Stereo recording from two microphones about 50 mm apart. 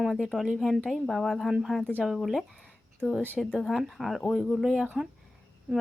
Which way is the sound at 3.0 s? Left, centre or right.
Centre.